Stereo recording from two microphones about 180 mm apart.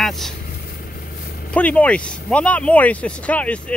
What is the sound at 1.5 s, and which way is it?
Speech, 5° left (ahead or behind).